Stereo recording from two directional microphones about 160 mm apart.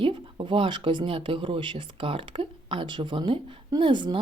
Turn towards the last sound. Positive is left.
turn(degrees=-30)  # may be behind; listen again after turning